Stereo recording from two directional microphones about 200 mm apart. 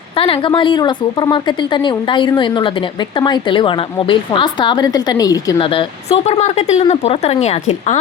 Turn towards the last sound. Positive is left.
turn(degrees=35)  # may be behind; listen again after turning